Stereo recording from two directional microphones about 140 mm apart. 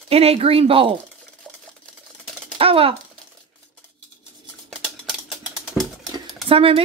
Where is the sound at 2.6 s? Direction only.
40° right (ahead or behind).